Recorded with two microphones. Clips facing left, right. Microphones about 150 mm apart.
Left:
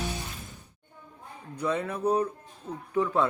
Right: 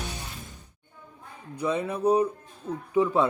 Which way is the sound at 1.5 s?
15° right (ahead or behind).